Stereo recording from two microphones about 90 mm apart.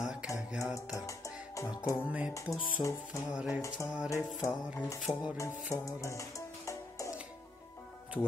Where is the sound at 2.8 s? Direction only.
35° left (ahead or behind).